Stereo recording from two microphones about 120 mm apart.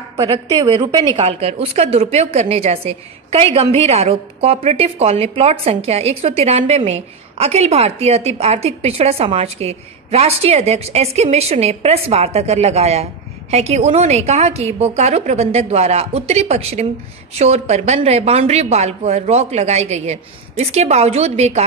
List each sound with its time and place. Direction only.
0.7 s a woman's voice: 40° right (ahead or behind)
1.1 s a woman's voice: 55° right (ahead or behind)